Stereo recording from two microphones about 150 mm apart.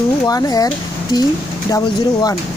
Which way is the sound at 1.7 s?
25° left (ahead or behind).